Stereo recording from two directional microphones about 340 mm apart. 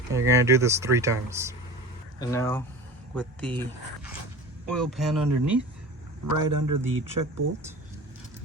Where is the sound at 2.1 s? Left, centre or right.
Centre.